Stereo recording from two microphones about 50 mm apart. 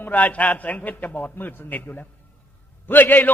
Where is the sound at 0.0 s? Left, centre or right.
Left.